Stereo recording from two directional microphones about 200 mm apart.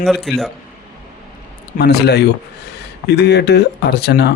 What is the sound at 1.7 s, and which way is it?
Speech, 55° left (ahead or behind).